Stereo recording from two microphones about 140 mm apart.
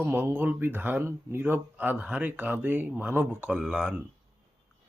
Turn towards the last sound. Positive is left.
turn(degrees=-5)  # may be behind; listen again after turning